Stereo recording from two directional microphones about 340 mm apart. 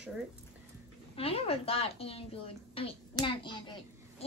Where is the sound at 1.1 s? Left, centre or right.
Centre.